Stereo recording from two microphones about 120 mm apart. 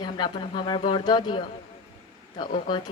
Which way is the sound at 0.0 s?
40° left (ahead or behind).